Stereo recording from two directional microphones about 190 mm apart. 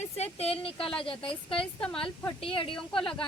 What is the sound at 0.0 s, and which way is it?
A woman's voice, 35° left (ahead or behind).